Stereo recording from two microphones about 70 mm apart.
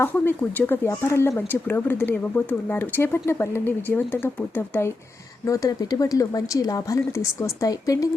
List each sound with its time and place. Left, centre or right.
0.0 s speech: left
0.9 s speech: left
5.5 s a woman's voice: left